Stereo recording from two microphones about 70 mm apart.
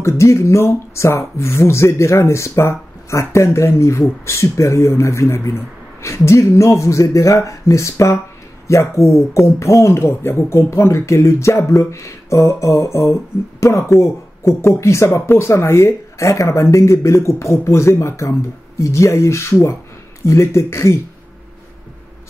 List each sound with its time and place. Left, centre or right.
0.0 s speech: left